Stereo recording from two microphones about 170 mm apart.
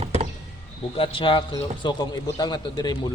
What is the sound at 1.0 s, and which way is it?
A man's voice, 30° left (ahead or behind).